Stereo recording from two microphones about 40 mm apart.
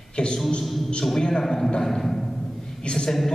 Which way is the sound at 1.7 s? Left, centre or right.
Centre.